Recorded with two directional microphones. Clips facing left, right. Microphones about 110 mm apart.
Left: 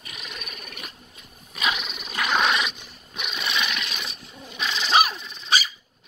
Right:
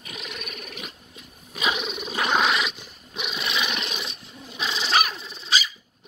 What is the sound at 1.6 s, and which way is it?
Dog, 20° right (ahead or behind).